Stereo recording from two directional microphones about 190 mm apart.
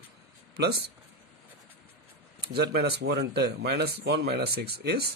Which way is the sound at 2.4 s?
55° right (ahead or behind).